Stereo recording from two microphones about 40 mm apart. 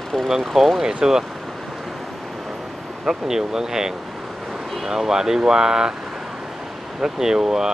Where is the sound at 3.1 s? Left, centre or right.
Centre.